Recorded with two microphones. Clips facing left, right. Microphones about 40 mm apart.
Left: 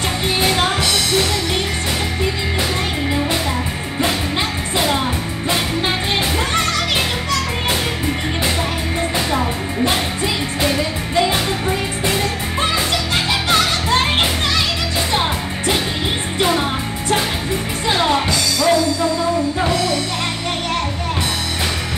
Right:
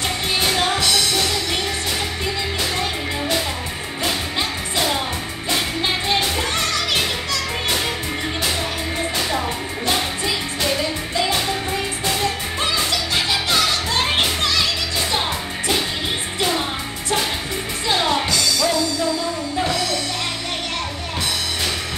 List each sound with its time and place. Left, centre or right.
0.4 s music: centre
11.1 s music: left
16.3 s music: left
17.8 s music: left